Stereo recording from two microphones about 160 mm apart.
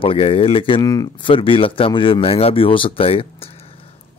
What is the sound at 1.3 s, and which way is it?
Speech, 35° left (ahead or behind).